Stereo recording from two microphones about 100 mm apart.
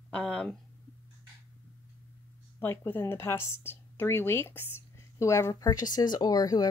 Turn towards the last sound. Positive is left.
turn(degrees=40)  # may be behind; listen again after turning